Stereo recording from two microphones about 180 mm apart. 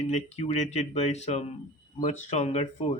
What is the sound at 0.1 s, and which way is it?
Speech, 40° left (ahead or behind).